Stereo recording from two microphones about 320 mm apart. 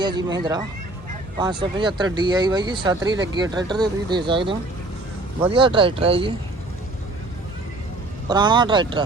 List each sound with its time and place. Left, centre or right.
0.0 s speech: centre
8.3 s speech: centre